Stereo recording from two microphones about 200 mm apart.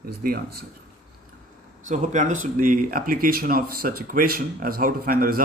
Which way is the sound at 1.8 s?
40° right (ahead or behind).